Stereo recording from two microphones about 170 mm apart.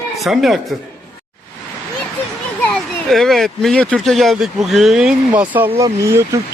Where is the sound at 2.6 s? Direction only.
5° left (ahead or behind).